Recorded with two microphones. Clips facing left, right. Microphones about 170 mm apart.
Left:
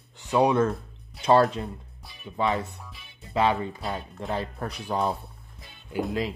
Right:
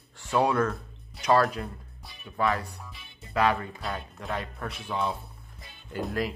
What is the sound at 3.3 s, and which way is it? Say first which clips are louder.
Speech: left 2 dB; 25° left (ahead or behind).